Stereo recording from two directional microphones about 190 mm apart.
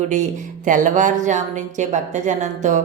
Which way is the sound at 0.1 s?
40° right (ahead or behind).